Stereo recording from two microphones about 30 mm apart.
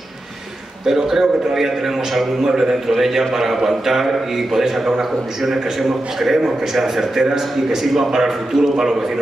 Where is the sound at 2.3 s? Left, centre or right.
Right.